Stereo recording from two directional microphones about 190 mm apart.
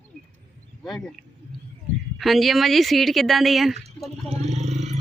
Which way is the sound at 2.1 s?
Centre (ahead or behind).